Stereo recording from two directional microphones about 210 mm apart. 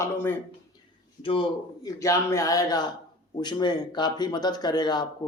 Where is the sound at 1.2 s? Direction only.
25° left (ahead or behind).